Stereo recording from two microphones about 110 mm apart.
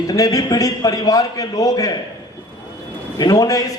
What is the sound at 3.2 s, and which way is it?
Speech, 35° left (ahead or behind).